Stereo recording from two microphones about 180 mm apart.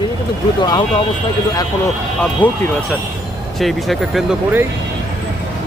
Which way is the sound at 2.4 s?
10° left (ahead or behind).